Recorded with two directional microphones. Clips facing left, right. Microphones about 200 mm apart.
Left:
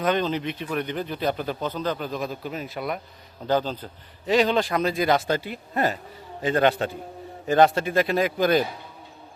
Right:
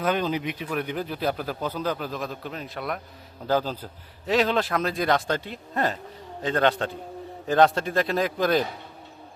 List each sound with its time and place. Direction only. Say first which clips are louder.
0.0 s a man's voice: left 1 dB; 5° right (ahead or behind)